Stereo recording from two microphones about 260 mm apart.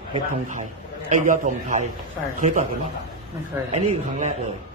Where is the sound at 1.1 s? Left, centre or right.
Right.